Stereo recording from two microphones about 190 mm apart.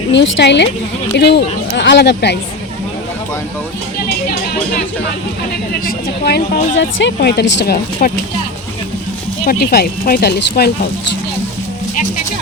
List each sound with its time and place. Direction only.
0.1 s speech: 70° left (ahead or behind)
5.8 s speech: 55° left (ahead or behind)
9.5 s speech: 55° left (ahead or behind)